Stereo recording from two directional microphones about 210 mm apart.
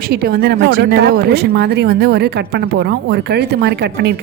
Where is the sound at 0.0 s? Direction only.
50° right (ahead or behind).